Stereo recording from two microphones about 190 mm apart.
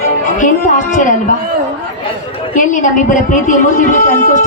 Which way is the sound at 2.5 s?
40° left (ahead or behind).